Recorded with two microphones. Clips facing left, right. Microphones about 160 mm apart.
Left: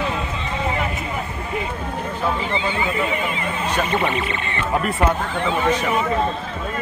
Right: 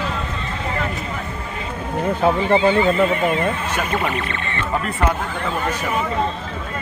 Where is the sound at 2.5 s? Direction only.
50° right (ahead or behind).